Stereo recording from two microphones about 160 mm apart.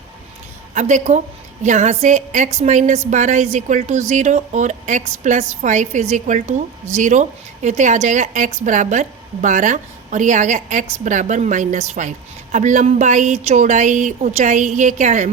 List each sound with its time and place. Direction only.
0.7 s a woman's voice: 50° right (ahead or behind)